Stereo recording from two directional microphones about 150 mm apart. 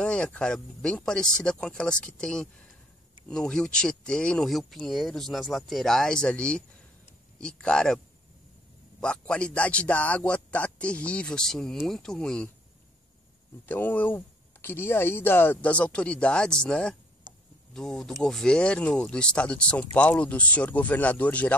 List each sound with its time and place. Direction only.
0.0 s speech: 5° left (ahead or behind)
9.0 s speech: 5° left (ahead or behind)
13.7 s speech: 10° left (ahead or behind)
17.3 s a sound: 25° right (ahead or behind)
17.7 s speech: 5° left (ahead or behind)